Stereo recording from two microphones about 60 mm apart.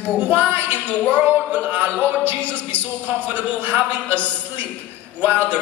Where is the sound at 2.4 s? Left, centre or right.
Left.